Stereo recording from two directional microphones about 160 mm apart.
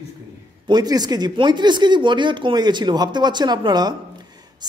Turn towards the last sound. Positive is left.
turn(degrees=-25)  # may be behind; listen again after turning